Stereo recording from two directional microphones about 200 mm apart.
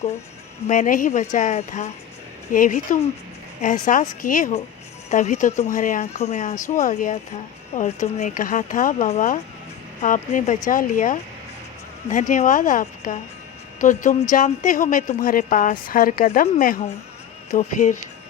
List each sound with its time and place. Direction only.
0.7 s a woman's voice: 40° left (ahead or behind)
12.3 s a woman's voice: 40° left (ahead or behind)